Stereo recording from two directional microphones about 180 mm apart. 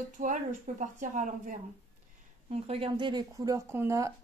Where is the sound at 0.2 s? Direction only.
45° right (ahead or behind).